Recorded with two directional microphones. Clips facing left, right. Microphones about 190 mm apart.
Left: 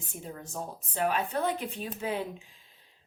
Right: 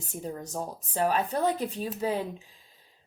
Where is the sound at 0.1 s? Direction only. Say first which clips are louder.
Right 6 dB; 40° right (ahead or behind).